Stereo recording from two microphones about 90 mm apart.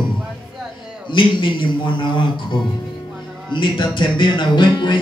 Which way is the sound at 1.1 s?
65° left (ahead or behind).